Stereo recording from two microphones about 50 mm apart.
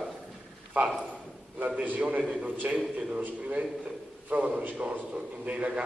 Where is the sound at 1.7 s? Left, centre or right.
Right.